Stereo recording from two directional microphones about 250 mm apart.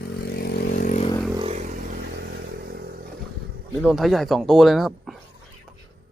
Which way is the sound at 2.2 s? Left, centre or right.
Right.